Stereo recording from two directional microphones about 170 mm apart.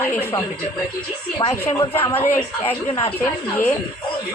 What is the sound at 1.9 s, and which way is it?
Speech, 10° left (ahead or behind).